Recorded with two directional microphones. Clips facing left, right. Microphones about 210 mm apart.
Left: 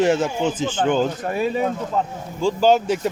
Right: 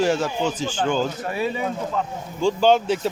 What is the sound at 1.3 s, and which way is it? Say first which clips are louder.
Speech: left 3 dB; 45° left (ahead or behind).